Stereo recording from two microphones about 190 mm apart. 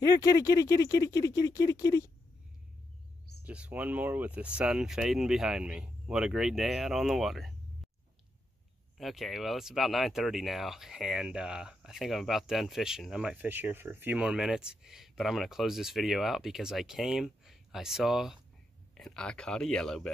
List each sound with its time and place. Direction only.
0.0 s speech: 15° left (ahead or behind)
3.4 s speech: 5° right (ahead or behind)
8.9 s speech: centre (ahead or behind)